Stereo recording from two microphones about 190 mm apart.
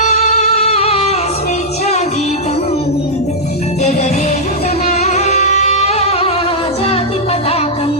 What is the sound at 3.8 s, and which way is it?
Music, 40° left (ahead or behind).